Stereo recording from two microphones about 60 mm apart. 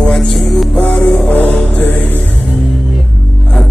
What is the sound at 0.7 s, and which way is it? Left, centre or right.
Music, left.